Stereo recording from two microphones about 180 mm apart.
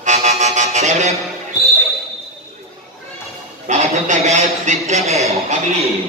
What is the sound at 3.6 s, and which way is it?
A man's voice, 40° right (ahead or behind).